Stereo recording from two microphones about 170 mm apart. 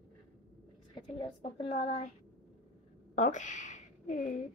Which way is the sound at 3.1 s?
45° left (ahead or behind).